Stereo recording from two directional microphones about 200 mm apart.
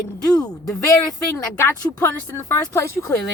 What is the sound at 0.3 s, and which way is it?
Speech, 20° left (ahead or behind).